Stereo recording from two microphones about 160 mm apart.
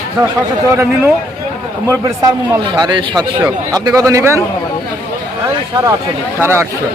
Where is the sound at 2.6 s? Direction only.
30° right (ahead or behind).